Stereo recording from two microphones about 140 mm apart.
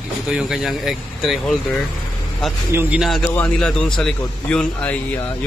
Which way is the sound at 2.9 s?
Centre (ahead or behind).